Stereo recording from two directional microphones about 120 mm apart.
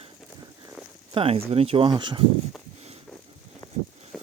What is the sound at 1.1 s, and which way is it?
Speech, 50° right (ahead or behind).